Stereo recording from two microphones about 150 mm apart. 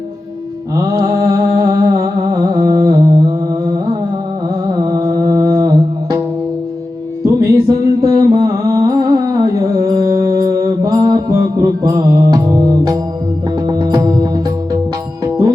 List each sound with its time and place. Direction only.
0.8 s music: 25° right (ahead or behind)
7.3 s music: 25° right (ahead or behind)